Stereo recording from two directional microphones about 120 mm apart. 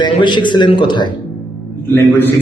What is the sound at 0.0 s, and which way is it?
Music, 40° left (ahead or behind).